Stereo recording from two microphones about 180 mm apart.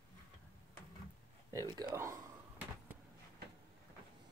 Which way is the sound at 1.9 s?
15° right (ahead or behind).